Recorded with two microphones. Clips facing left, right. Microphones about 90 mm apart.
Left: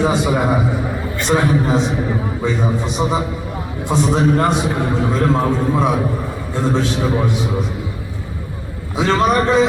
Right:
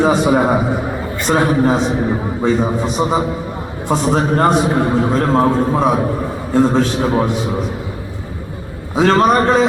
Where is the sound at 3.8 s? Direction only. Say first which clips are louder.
Even; 40° right (ahead or behind).